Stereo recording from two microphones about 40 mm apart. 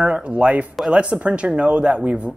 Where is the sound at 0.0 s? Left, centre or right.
Right.